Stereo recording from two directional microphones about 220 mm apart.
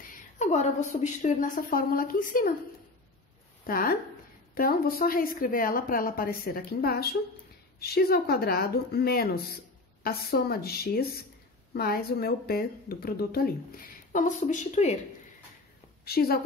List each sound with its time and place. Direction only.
0.1 s a woman's voice: 30° left (ahead or behind)
3.6 s a woman's voice: 40° left (ahead or behind)
16.1 s a woman's voice: 45° left (ahead or behind)